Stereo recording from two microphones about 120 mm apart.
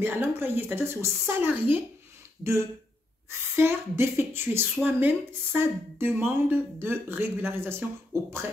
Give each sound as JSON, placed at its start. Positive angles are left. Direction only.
{"t": 0.0, "sound": "speech", "side_deg": -20}
{"t": 3.3, "sound": "a woman's voice", "side_deg": -20}